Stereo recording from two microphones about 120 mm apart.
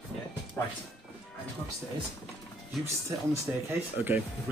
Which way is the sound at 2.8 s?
25° right (ahead or behind).